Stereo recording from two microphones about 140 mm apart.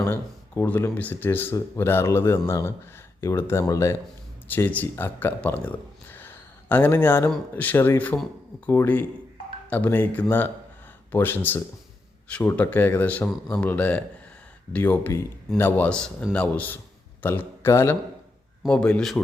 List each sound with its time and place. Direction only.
0.0 s a man's voice: 15° left (ahead or behind)
18.7 s speech: 5° left (ahead or behind)